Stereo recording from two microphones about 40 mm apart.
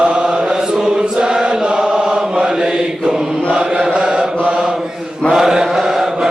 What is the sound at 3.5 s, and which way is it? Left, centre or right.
Chant, centre.